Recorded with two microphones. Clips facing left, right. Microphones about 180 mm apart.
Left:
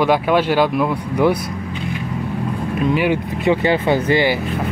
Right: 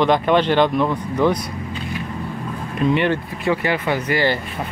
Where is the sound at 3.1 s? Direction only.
20° left (ahead or behind).